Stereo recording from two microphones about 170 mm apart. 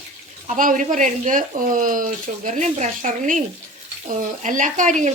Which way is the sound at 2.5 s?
45° right (ahead or behind).